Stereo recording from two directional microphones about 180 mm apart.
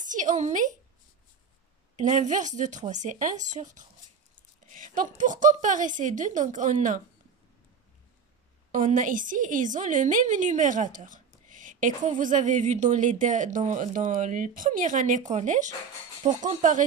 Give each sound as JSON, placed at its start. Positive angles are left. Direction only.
{"t": 0.0, "sound": "speech", "side_deg": -45}
{"t": 2.0, "sound": "a woman's voice", "side_deg": -40}
{"t": 8.7, "sound": "a woman's voice", "side_deg": -45}